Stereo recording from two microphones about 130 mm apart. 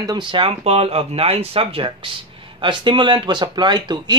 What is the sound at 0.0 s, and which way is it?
Speech, 35° right (ahead or behind).